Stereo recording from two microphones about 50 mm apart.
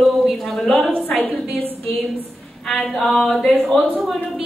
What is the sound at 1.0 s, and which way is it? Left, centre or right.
Speech, left.